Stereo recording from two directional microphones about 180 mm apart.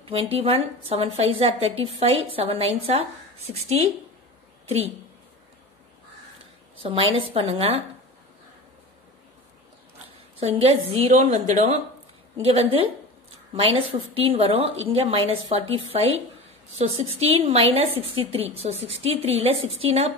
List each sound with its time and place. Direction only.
0.0 s a woman's voice: 30° right (ahead or behind)
6.8 s a woman's voice: 30° right (ahead or behind)
10.6 s a woman's voice: 35° right (ahead or behind)